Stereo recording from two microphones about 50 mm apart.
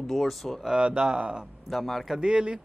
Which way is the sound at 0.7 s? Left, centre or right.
Right.